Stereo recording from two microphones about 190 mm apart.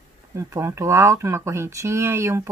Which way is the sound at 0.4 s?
15° right (ahead or behind).